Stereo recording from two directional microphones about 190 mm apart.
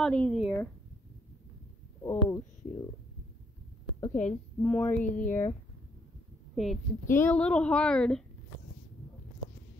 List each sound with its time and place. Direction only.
0.0 s a woman's voice: 5° left (ahead or behind)
2.0 s speech: 15° left (ahead or behind)
4.1 s speech: 40° left (ahead or behind)
4.6 s speech: 5° left (ahead or behind)
5.0 s speech: 40° left (ahead or behind)
6.5 s a woman's voice: centre (ahead or behind)